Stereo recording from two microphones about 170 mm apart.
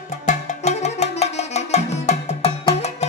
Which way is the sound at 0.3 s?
40° left (ahead or behind).